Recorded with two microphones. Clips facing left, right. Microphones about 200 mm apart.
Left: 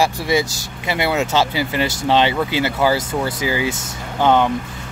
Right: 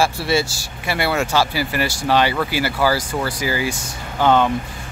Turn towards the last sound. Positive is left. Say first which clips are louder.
# left 1 dB
turn(degrees=15)  # may be behind; listen again after turning